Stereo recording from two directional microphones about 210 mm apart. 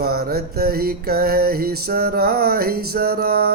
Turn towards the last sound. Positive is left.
turn(degrees=-45)  # may be behind; listen again after turning